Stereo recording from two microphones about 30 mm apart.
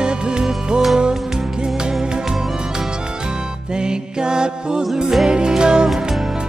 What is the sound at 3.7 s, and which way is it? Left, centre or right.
Music, right.